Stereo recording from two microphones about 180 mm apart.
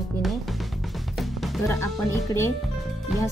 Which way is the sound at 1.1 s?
Centre (ahead or behind).